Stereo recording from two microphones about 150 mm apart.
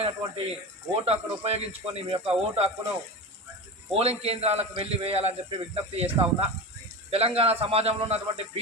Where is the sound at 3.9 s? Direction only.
45° right (ahead or behind).